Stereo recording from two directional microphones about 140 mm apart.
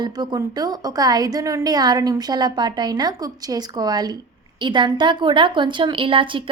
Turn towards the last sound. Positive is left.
turn(degrees=-40)  # may be behind; listen again after turning